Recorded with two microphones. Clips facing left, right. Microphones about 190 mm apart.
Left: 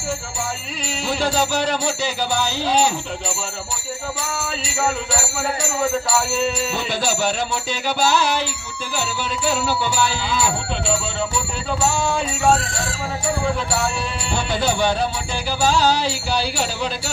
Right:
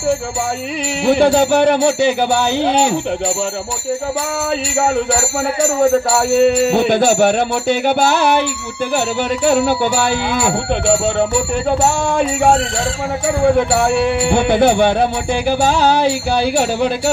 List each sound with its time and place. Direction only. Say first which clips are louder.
1.0 s jingle bell: right 10 dB; 60° right (ahead or behind)
4.4 s jingle bell: right 7 dB; 60° right (ahead or behind)
13.6 s jingle bell: right 10 dB; 60° right (ahead or behind)